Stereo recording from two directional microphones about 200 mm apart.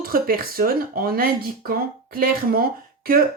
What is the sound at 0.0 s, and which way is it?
Speech, 45° right (ahead or behind).